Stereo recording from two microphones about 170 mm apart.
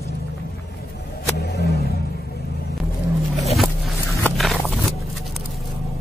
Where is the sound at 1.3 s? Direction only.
70° left (ahead or behind).